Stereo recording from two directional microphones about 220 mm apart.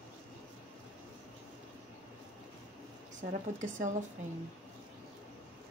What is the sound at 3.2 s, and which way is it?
Speech, 50° right (ahead or behind).